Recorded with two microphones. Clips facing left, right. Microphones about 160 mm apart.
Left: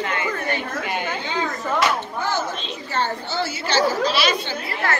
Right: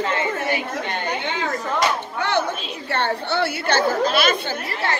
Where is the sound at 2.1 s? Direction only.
70° right (ahead or behind); by 4.7 s 50° right (ahead or behind).